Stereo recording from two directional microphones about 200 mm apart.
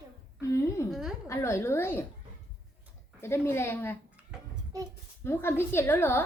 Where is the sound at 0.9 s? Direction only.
Centre (ahead or behind).